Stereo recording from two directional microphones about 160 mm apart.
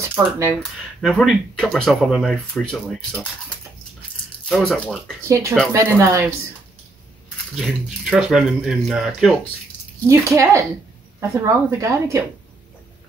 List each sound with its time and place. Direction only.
0.1 s speech: 15° right (ahead or behind)
0.6 s speech: 5° left (ahead or behind)
4.5 s speech: centre (ahead or behind)
5.7 s speech: 15° right (ahead or behind)
7.5 s speech: centre (ahead or behind)
10.0 s speech: 20° right (ahead or behind)